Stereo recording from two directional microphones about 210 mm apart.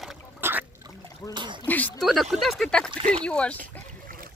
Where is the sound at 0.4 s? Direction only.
10° right (ahead or behind).